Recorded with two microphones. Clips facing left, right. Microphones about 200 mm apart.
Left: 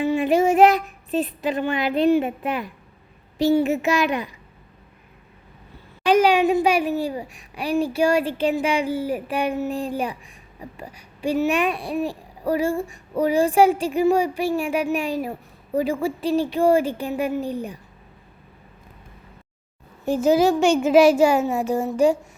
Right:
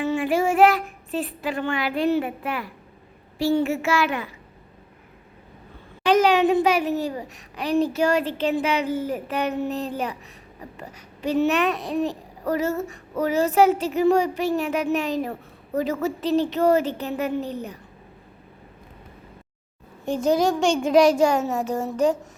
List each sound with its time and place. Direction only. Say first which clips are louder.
0.0 s a child's voice: left 3 dB; 15° left (ahead or behind)
6.1 s a child's voice: left 1 dB; 10° left (ahead or behind)
20.1 s a child's voice: left 3 dB; 5° left (ahead or behind)